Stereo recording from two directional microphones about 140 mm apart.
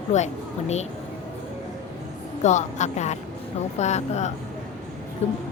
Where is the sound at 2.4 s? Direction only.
60° left (ahead or behind).